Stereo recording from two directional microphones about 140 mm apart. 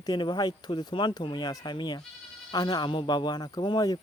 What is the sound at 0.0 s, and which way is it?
Speech, 30° left (ahead or behind).